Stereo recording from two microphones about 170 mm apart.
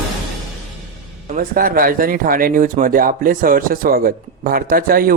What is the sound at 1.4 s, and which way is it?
Speech, 55° right (ahead or behind).